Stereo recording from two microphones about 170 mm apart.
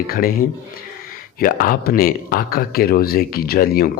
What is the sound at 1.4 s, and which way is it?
Speech, 55° left (ahead or behind).